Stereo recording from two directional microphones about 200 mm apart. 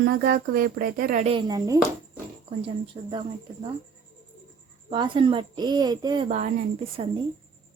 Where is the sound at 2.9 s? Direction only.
25° right (ahead or behind).